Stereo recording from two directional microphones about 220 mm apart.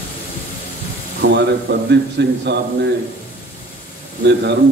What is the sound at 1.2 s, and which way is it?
A man's voice, 50° right (ahead or behind).